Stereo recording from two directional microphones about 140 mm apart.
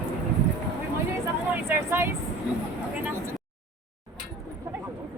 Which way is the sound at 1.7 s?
15° right (ahead or behind).